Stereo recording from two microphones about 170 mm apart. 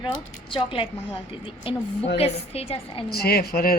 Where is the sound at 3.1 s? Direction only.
65° left (ahead or behind).